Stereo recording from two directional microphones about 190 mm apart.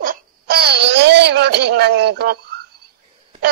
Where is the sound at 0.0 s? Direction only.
50° right (ahead or behind).